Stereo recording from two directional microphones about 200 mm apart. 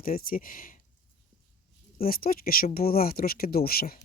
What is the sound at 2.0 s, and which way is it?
Speech, 45° left (ahead or behind).